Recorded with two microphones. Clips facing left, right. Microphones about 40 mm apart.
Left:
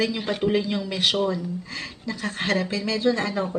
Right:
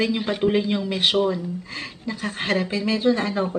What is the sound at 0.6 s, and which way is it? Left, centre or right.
A woman's voice, right.